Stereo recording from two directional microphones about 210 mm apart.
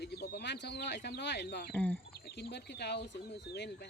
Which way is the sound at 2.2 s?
50° left (ahead or behind).